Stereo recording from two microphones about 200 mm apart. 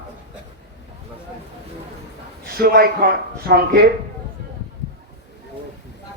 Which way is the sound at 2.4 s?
50° right (ahead or behind).